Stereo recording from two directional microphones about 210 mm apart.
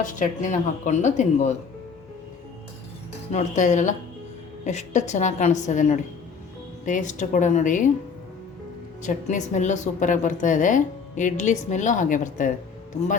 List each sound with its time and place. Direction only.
0.0 s a woman's voice: 35° left (ahead or behind)
3.3 s a woman's voice: 35° left (ahead or behind)
9.0 s a woman's voice: 35° left (ahead or behind)